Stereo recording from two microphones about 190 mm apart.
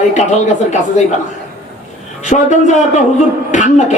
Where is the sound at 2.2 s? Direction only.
40° left (ahead or behind).